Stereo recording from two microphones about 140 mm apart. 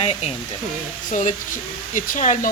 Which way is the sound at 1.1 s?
65° left (ahead or behind).